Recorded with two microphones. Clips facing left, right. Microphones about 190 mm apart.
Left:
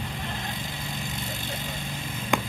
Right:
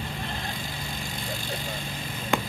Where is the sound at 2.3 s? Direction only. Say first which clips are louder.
Even; 15° left (ahead or behind).